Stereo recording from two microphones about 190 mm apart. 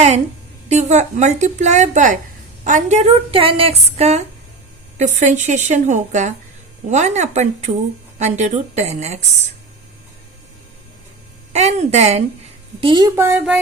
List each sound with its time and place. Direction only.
0.7 s speech: 35° right (ahead or behind)
11.5 s a woman's voice: 35° right (ahead or behind)
13.1 s speech: 10° right (ahead or behind)